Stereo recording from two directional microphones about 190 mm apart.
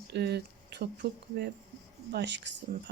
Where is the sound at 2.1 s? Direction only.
65° right (ahead or behind).